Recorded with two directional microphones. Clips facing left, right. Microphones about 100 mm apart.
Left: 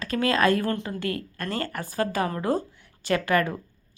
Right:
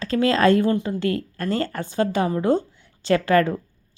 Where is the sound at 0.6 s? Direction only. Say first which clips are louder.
Right 6 dB; 20° right (ahead or behind).